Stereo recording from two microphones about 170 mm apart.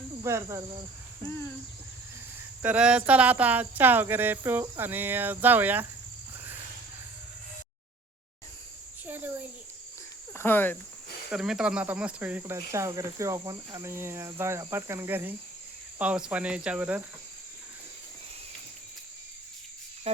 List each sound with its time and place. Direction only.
0.3 s speech: 20° right (ahead or behind)
2.6 s speech: 5° right (ahead or behind)
9.0 s speech: 10° right (ahead or behind)
10.3 s speech: 15° left (ahead or behind)
11.3 s speech: 5° right (ahead or behind)